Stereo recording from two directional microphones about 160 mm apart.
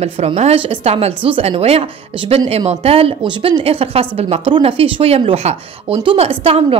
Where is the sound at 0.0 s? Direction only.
40° right (ahead or behind).